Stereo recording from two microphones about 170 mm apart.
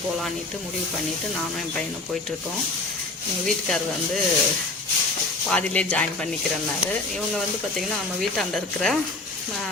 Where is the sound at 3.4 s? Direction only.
Centre (ahead or behind).